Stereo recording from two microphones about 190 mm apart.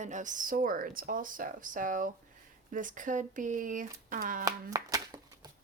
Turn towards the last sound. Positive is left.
turn(degrees=-20)  # may be behind; listen again after turning